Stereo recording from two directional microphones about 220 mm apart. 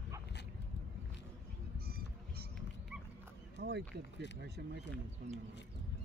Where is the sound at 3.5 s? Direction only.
45° right (ahead or behind).